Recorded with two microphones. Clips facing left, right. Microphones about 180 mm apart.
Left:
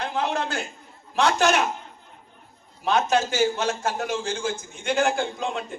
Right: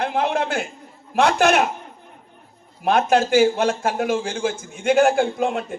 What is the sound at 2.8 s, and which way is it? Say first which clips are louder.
A man's voice: right 4 dB; 55° right (ahead or behind).